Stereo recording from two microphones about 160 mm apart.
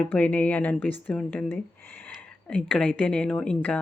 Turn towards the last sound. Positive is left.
turn(degrees=10)  # may be behind; listen again after turning